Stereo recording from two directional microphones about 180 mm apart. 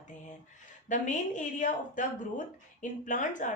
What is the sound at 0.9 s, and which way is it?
A woman's voice, 45° left (ahead or behind).